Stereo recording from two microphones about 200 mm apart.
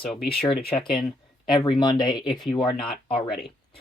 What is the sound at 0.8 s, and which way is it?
Speech, 25° left (ahead or behind).